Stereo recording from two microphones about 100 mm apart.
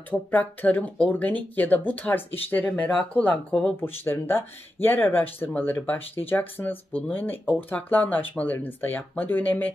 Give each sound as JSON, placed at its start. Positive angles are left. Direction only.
{"t": 0.1, "sound": "speech", "side_deg": 15}